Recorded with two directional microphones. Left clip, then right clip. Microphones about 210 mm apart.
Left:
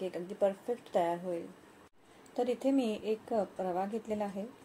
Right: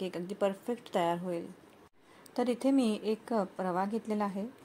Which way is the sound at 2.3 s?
45° right (ahead or behind).